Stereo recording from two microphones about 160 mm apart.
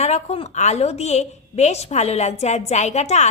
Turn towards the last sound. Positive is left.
turn(degrees=45)  # may be behind; listen again after turning